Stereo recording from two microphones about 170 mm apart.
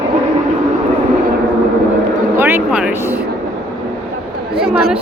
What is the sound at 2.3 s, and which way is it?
Vehicle, 15° right (ahead or behind).